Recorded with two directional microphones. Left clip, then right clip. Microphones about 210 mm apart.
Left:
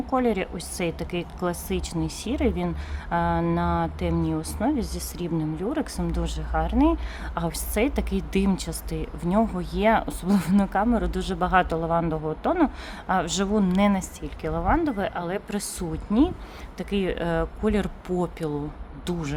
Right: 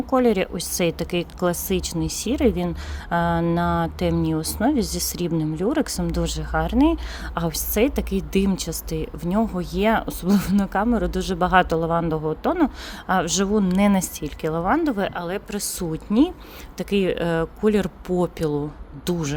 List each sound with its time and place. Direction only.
0.0 s a woman's voice: 15° right (ahead or behind)